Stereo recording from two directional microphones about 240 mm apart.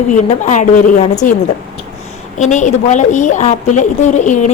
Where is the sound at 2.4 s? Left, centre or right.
Left.